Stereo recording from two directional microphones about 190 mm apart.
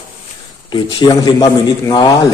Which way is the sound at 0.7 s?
20° left (ahead or behind).